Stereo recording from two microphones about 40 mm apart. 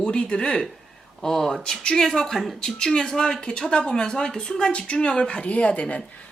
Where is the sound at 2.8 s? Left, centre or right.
Centre.